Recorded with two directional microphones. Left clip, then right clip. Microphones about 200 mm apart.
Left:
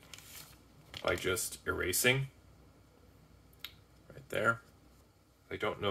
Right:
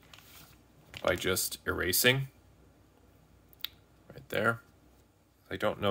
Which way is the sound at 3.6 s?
40° right (ahead or behind).